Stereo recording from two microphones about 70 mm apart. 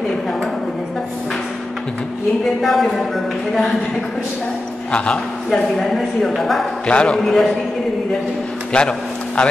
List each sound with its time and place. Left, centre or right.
2.6 s a woman's voice: centre
4.9 s a man's voice: centre
5.5 s a woman's voice: centre
6.9 s a man's voice: centre
7.2 s a woman's voice: centre
8.7 s a man's voice: centre